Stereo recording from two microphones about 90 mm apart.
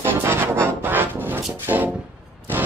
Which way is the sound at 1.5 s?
20° right (ahead or behind).